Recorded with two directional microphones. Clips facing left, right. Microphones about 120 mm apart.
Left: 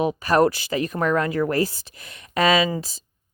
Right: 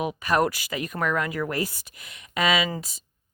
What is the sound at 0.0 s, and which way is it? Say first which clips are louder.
Speech: left 5 dB; 30° left (ahead or behind).